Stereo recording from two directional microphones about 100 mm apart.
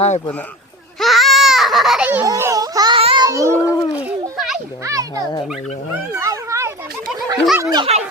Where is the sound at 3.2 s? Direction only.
30° right (ahead or behind).